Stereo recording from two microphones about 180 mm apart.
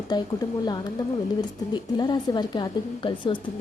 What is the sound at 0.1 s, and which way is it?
A woman's voice, 25° left (ahead or behind).